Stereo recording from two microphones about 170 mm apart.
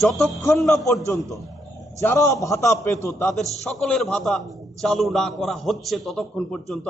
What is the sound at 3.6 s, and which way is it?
A man's voice, 5° left (ahead or behind).